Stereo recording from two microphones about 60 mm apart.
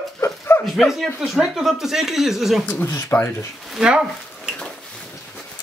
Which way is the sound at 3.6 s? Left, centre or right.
Centre.